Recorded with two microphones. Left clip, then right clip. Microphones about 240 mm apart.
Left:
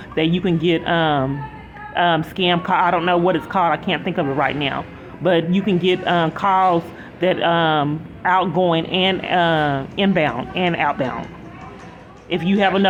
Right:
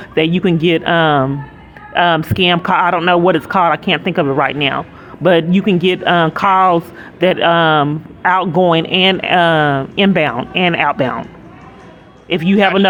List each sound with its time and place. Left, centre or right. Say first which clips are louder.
0.1 s speech: right 5 dB; right
12.3 s speech: right 5 dB; right